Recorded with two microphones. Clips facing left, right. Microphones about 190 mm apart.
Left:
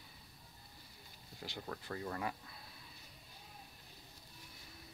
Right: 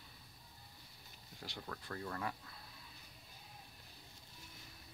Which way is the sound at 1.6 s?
10° left (ahead or behind).